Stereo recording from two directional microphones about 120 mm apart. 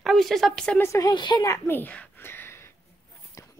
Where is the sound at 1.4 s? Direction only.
20° left (ahead or behind).